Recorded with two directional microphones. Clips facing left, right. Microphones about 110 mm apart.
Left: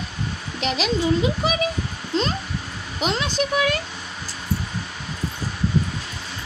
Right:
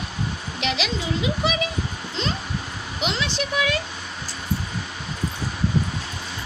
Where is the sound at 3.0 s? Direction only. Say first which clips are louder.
Left 3 dB; 45° left (ahead or behind).